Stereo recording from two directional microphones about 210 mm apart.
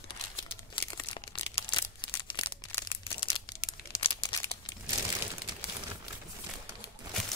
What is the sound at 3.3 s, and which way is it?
Crumpling, 20° left (ahead or behind).